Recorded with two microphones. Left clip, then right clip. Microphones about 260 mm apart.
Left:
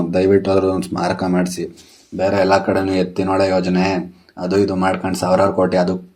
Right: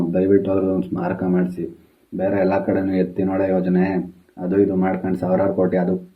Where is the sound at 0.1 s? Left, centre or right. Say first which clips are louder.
Left 4 dB; left.